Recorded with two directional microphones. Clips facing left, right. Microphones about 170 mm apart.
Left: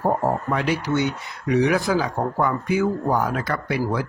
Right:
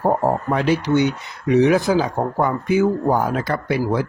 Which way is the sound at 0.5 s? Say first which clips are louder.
Right 5 dB; 30° right (ahead or behind).